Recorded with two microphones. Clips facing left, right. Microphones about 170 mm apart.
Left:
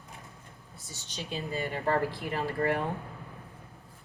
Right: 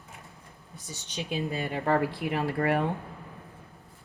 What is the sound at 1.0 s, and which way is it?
Speech, 65° right (ahead or behind).